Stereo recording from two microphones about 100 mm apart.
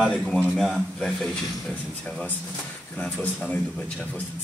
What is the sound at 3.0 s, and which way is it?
Speech, 10° left (ahead or behind).